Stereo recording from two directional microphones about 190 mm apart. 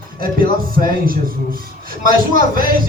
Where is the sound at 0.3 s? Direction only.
50° right (ahead or behind).